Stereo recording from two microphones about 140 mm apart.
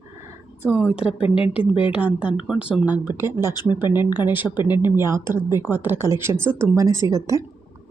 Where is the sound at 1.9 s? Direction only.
10° right (ahead or behind).